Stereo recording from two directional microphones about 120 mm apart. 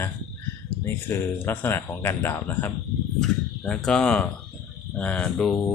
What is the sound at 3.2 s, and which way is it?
Speech, 5° left (ahead or behind).